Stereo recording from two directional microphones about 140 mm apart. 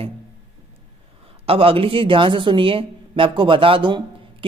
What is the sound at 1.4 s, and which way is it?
A woman's voice, 40° right (ahead or behind).